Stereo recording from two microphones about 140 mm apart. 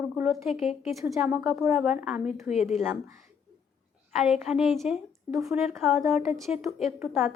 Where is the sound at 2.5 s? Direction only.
50° left (ahead or behind).